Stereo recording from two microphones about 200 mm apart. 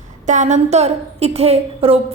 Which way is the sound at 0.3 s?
35° right (ahead or behind).